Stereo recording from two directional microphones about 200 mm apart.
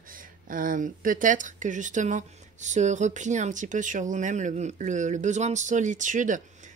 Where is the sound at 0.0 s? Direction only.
45° right (ahead or behind).